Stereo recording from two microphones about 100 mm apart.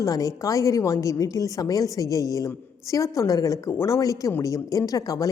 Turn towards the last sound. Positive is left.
turn(degrees=35)  # may be behind; listen again after turning